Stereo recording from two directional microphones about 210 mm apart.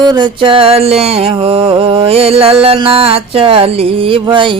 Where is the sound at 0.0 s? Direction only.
20° right (ahead or behind).